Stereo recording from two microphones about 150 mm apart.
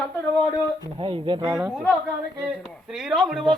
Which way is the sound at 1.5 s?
20° right (ahead or behind).